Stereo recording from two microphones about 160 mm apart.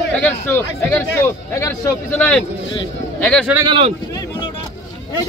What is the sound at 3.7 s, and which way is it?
Speech, 35° right (ahead or behind).